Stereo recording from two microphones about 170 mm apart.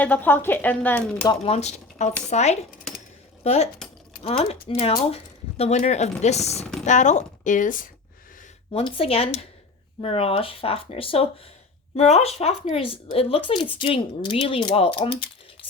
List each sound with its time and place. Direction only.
0.0 s speech: 10° left (ahead or behind)
1.3 s speech: 40° left (ahead or behind)
8.7 s speech: 30° left (ahead or behind)